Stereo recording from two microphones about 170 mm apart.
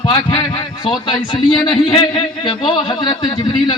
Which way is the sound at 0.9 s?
25° left (ahead or behind).